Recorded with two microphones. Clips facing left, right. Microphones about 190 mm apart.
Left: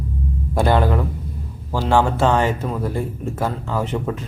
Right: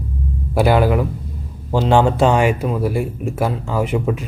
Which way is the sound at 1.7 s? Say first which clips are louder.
Right 3 dB; 20° right (ahead or behind).